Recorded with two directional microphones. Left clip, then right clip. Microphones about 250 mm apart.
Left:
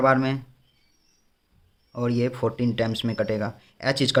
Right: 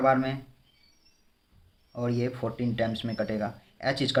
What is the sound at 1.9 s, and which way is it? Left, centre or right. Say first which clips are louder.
Speech: left 5 dB; left.